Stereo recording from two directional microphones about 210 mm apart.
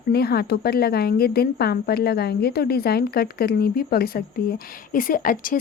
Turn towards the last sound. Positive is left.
turn(degrees=40)  # may be behind; listen again after turning